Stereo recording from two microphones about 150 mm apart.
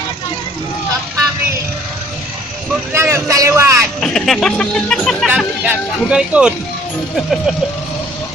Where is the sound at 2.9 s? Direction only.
15° right (ahead or behind).